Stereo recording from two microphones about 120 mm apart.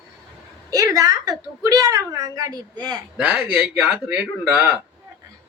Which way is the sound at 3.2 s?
10° right (ahead or behind).